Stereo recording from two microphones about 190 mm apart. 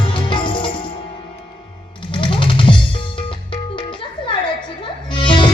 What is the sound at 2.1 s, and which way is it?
Music, 25° left (ahead or behind).